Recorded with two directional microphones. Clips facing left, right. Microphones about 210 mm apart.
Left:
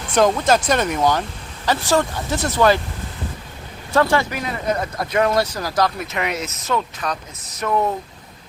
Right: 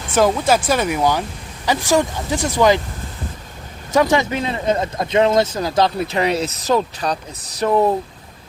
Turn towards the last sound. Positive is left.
turn(degrees=-35)  # may be behind; listen again after turning